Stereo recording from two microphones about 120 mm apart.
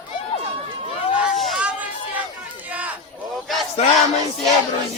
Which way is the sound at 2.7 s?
10° right (ahead or behind).